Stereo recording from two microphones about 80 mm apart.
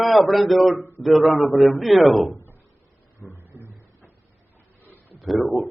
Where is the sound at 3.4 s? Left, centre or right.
Right.